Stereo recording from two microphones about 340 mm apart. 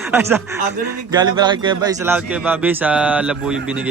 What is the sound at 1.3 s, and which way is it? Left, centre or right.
Speech, centre.